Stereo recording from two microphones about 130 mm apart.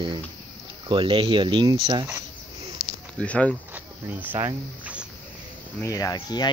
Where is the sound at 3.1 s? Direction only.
10° left (ahead or behind).